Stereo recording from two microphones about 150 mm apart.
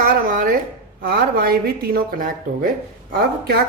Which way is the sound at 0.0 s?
75° right (ahead or behind).